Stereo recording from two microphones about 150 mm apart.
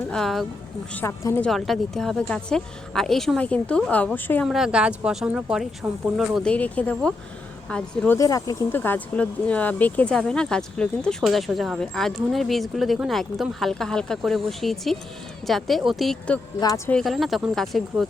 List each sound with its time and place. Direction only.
0.1 s speech: centre (ahead or behind)
0.9 s speech: 15° left (ahead or behind)
1.5 s speech: centre (ahead or behind)
4.4 s speech: 5° right (ahead or behind)
5.8 s speech: 15° right (ahead or behind)
6.1 s speech: centre (ahead or behind)
8.2 s speech: 25° left (ahead or behind); by 16.4 s 5° left (ahead or behind)
16.6 s speech: 20° left (ahead or behind)
16.9 s speech: centre (ahead or behind)